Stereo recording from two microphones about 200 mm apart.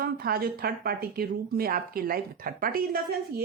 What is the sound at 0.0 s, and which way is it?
A woman's voice, 50° right (ahead or behind).